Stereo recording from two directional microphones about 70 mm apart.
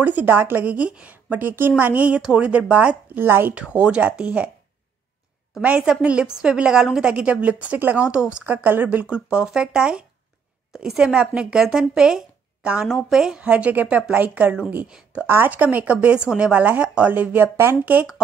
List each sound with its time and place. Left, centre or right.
0.0 s a woman's voice: right
3.5 s a woman's voice: centre
5.6 s a woman's voice: centre
13.4 s a woman's voice: centre
15.2 s a woman's voice: right